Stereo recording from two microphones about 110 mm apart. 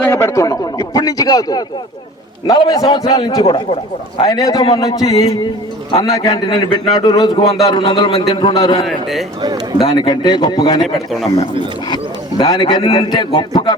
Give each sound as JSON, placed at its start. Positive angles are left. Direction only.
{"t": 0.0, "sound": "a man's voice", "side_deg": 25}
{"t": 3.2, "sound": "a man's voice", "side_deg": 50}
{"t": 4.2, "sound": "a man's voice", "side_deg": 40}
{"t": 8.9, "sound": "speech", "side_deg": 0}
{"t": 9.4, "sound": "speech", "side_deg": -35}
{"t": 9.9, "sound": "a man's voice", "side_deg": 45}
{"t": 10.8, "sound": "speech", "side_deg": 0}
{"t": 12.4, "sound": "a man's voice", "side_deg": 45}